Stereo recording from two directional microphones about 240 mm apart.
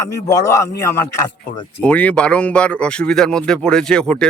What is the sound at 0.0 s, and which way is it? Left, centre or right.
Speech, centre.